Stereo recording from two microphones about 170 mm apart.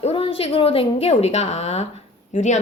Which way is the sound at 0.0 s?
35° left (ahead or behind).